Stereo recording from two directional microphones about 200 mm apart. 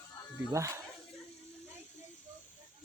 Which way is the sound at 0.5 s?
15° right (ahead or behind).